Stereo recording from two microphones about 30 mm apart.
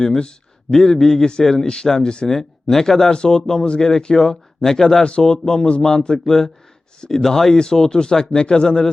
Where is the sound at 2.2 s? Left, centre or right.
Centre.